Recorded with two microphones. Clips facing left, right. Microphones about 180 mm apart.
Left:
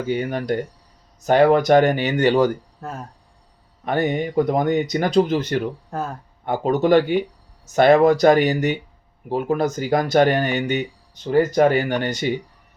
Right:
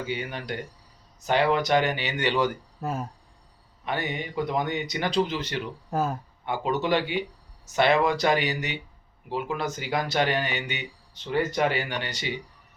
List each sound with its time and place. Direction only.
0.1 s speech: 45° left (ahead or behind)
2.8 s speech: 5° right (ahead or behind)
3.8 s speech: 45° left (ahead or behind)
5.9 s speech: 5° right (ahead or behind)
6.4 s speech: 45° left (ahead or behind)